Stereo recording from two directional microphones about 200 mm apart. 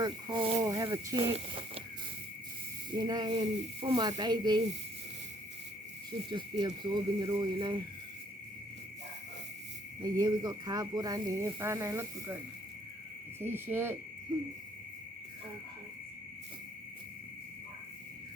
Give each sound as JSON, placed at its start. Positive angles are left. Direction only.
{"t": 0.0, "sound": "speech", "side_deg": -25}
{"t": 2.9, "sound": "speech", "side_deg": -20}
{"t": 6.1, "sound": "speech", "side_deg": -20}
{"t": 10.0, "sound": "speech", "side_deg": -20}
{"t": 13.4, "sound": "cricket", "side_deg": -10}